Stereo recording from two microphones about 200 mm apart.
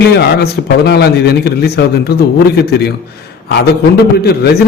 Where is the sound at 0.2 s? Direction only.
55° left (ahead or behind).